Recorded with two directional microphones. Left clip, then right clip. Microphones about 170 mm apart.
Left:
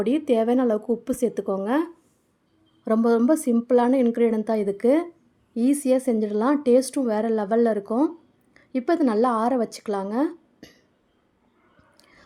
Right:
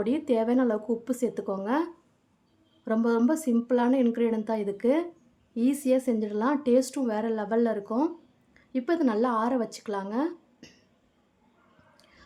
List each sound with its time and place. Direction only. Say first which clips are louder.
0.0 s a woman's voice: left 5 dB; 25° left (ahead or behind)
11.9 s whispering: left 5 dB; 25° left (ahead or behind)